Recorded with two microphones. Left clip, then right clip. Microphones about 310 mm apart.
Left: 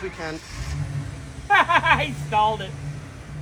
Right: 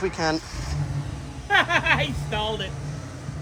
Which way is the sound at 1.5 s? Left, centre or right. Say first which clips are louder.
Left 3 dB; centre.